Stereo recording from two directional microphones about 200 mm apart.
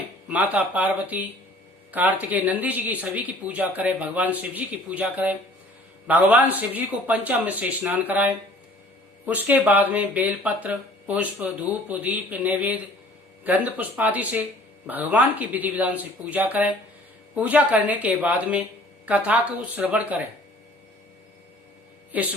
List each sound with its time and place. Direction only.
0.3 s speech: 10° right (ahead or behind)
22.1 s speech: 10° right (ahead or behind)